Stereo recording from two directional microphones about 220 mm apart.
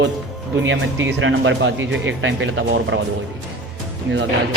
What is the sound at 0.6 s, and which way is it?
Speech, 60° right (ahead or behind).